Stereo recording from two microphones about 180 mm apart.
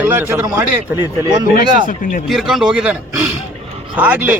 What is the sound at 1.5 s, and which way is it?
Speech, 50° left (ahead or behind).